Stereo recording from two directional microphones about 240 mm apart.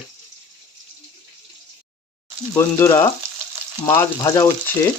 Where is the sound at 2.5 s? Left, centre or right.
Centre.